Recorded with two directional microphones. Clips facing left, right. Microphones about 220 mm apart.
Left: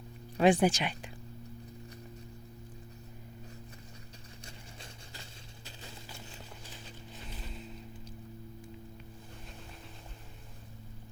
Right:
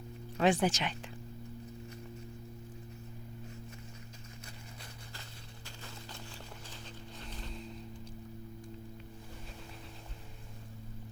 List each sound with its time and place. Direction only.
0.3 s speech: 15° left (ahead or behind)
5.6 s a sound: 15° left (ahead or behind)
6.7 s dog: 10° left (ahead or behind)